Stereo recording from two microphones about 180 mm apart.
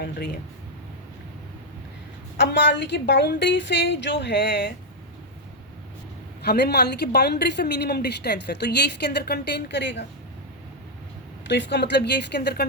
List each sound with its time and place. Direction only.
2.4 s a woman's voice: 70° left (ahead or behind)
6.4 s a woman's voice: 65° left (ahead or behind)
11.4 s a woman's voice: 75° left (ahead or behind)